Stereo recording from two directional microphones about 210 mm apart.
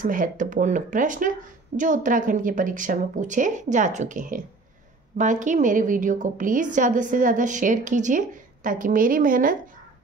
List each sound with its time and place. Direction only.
0.0 s a woman's voice: 40° right (ahead or behind)